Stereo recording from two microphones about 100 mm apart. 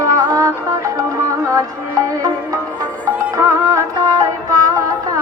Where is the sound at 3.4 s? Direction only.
30° right (ahead or behind).